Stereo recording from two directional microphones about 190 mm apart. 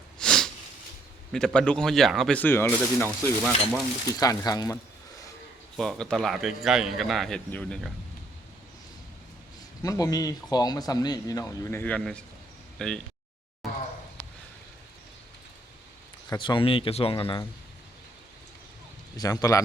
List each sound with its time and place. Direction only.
0.2 s sniff: 5° left (ahead or behind)
1.3 s a man's voice: 5° left (ahead or behind)
3.1 s a man's voice: centre (ahead or behind)
4.1 s speech: 20° left (ahead or behind)
5.7 s a man's voice: 5° left (ahead or behind)
9.8 s a man's voice: 20° left (ahead or behind)
16.3 s speech: 25° left (ahead or behind)
19.1 s speech: 20° left (ahead or behind)